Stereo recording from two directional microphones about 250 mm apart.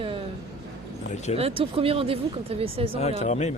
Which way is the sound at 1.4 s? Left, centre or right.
Right.